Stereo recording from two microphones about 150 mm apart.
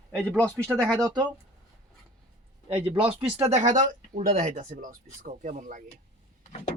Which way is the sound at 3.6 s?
55° right (ahead or behind).